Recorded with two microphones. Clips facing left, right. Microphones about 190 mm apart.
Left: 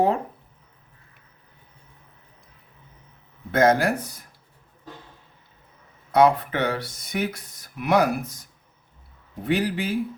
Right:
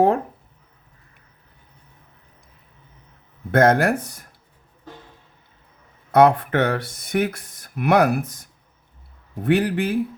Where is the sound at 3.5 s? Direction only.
55° right (ahead or behind).